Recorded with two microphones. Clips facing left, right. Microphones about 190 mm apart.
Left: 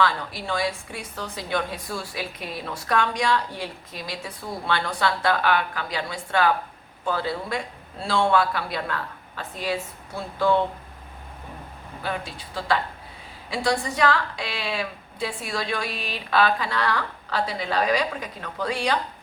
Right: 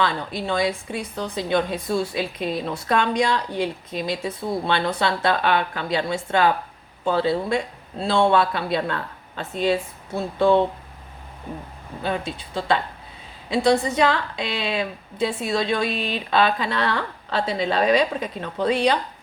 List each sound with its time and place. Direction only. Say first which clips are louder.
0.0 s a woman's voice: right 1 dB; 20° right (ahead or behind)
12.0 s a woman's voice: right 5 dB; 25° right (ahead or behind)